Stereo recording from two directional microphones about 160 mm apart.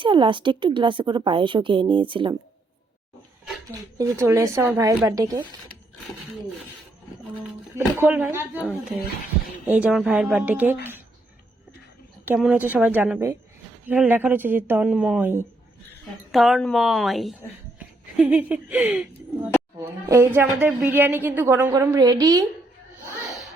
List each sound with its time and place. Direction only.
0.0 s speech: 30° right (ahead or behind)
3.7 s speech: 20° right (ahead or behind)
7.9 s speech: 10° right (ahead or behind)
9.6 s speech: 10° right (ahead or behind)
12.2 s speech: 10° right (ahead or behind)
16.3 s a woman's voice: centre (ahead or behind); by 22.4 s 25° right (ahead or behind)